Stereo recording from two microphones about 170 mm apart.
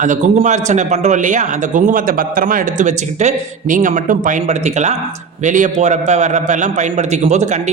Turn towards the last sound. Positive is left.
turn(degrees=-40)  # may be behind; listen again after turning